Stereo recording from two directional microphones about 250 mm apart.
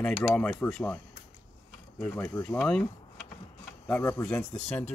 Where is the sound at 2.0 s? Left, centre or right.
Centre.